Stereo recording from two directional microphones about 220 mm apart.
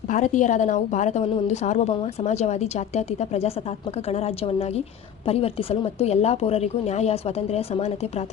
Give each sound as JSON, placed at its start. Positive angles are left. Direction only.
{"t": 0.1, "sound": "a woman's voice", "side_deg": 35}